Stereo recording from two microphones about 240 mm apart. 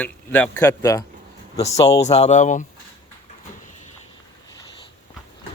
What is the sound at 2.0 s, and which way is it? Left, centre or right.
Speech, left.